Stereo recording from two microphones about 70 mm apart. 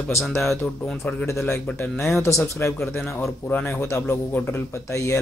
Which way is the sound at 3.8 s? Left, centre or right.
Left.